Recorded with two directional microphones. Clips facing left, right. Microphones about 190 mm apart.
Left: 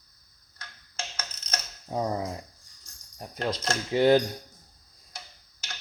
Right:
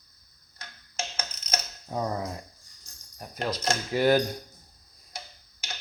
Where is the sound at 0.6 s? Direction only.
25° right (ahead or behind).